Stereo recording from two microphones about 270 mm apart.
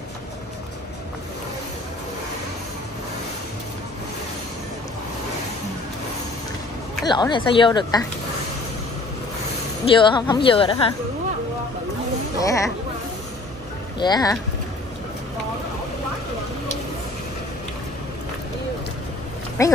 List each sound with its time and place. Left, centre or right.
7.1 s speech: centre
9.9 s speech: centre
12.4 s speech: centre
13.9 s speech: centre
19.6 s speech: centre